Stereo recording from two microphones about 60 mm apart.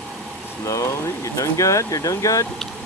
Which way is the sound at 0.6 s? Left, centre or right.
Left.